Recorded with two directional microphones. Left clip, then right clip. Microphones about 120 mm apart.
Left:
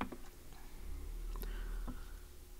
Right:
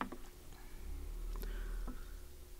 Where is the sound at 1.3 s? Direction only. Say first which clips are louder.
Even; 5° left (ahead or behind).